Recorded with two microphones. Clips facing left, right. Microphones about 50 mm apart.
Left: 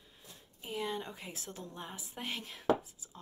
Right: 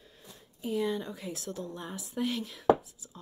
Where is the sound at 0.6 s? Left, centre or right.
Left.